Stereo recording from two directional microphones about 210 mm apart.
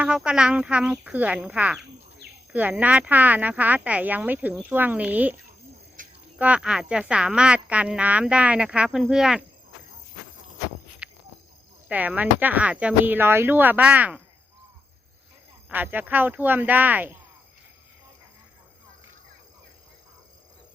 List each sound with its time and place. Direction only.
0.0 s speech: 5° right (ahead or behind)
6.0 s a sound: 40° right (ahead or behind)
6.4 s speech: 5° right (ahead or behind)
11.0 s cricket: 5° right (ahead or behind)
11.9 s speech: 5° right (ahead or behind)
15.7 s speech: 10° right (ahead or behind)